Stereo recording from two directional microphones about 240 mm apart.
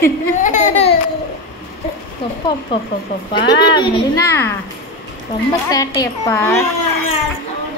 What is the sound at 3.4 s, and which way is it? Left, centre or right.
A woman's voice, centre.